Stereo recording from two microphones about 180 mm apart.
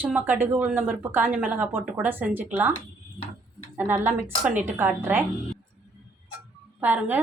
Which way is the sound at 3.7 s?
10° right (ahead or behind).